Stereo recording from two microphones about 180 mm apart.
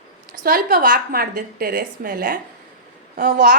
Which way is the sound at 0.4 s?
55° right (ahead or behind).